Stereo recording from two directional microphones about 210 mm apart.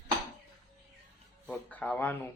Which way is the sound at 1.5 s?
5° left (ahead or behind).